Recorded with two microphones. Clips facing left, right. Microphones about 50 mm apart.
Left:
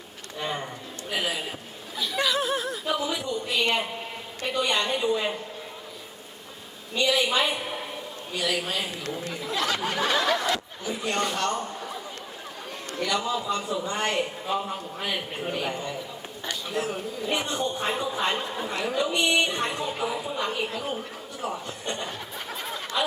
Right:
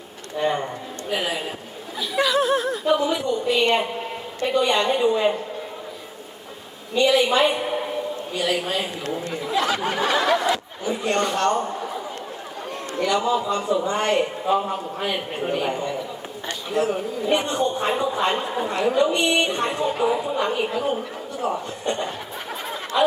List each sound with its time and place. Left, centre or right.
0.3 s speech: centre
7.1 s speech: centre
7.4 s a sound: centre
9.3 s a man's voice: centre
13.0 s a man's voice: centre
16.5 s speech: centre
22.9 s a sound: centre